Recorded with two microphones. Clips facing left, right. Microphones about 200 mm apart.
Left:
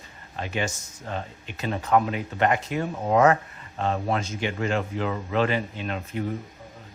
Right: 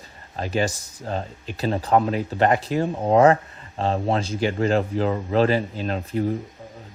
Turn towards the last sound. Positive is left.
turn(degrees=-35)  # may be behind; listen again after turning